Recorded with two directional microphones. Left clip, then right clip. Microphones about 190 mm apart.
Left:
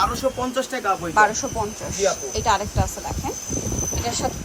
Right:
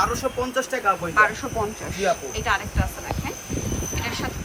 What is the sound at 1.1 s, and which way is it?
Speech, 25° left (ahead or behind).